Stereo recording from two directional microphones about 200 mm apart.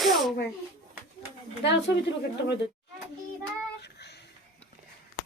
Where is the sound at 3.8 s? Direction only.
55° left (ahead or behind).